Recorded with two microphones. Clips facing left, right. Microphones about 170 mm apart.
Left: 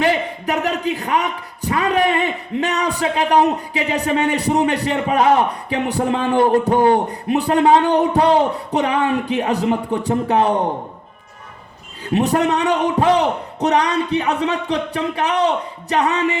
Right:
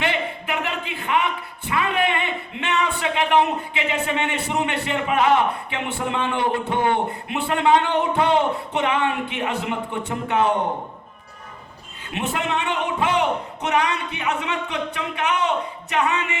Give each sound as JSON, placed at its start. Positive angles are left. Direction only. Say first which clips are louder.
{"t": 0.0, "sound": "speech", "louder": "left 6 dB", "side_deg": 40}
{"t": 12.0, "sound": "speech", "louder": "left 9 dB", "side_deg": 35}